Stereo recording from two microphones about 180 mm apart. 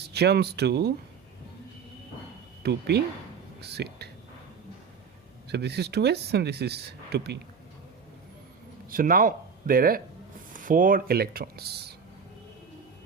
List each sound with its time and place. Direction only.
0.0 s speech: 65° right (ahead or behind)
2.6 s speech: 65° right (ahead or behind)
5.5 s speech: 65° right (ahead or behind)
8.9 s speech: 50° right (ahead or behind)